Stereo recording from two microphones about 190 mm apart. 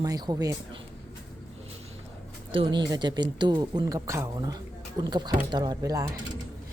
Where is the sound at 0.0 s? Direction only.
20° right (ahead or behind).